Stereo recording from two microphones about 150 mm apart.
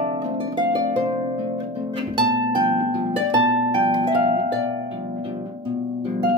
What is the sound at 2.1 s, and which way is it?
Harp, 30° right (ahead or behind).